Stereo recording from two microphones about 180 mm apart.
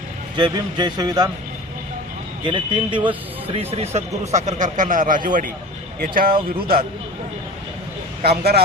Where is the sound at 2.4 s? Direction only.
25° right (ahead or behind); by 6.3 s 50° right (ahead or behind).